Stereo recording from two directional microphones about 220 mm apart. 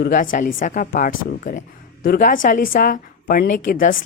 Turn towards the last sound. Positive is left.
turn(degrees=40)  # may be behind; listen again after turning